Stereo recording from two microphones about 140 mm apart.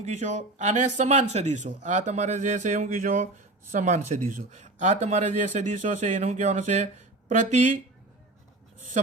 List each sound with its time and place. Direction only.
0.0 s speech: 60° right (ahead or behind); by 3.2 s 75° right (ahead or behind)
3.7 s speech: 60° right (ahead or behind)